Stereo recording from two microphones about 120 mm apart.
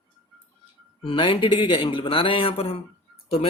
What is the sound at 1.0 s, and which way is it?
Speech, 45° left (ahead or behind).